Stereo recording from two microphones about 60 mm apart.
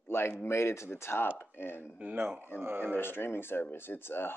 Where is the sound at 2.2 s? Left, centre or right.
Right.